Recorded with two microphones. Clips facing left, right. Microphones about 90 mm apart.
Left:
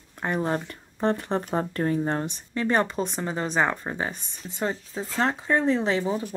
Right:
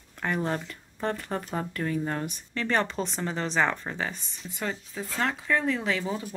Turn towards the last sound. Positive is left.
turn(degrees=30)  # may be behind; listen again after turning